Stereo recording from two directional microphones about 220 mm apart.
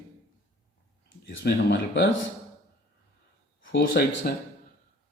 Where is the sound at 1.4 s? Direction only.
50° left (ahead or behind).